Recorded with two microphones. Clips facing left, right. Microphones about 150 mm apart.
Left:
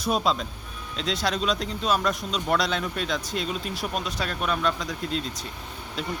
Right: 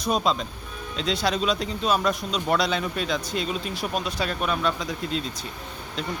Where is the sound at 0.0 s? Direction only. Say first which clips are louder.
Right 1 dB; centre (ahead or behind).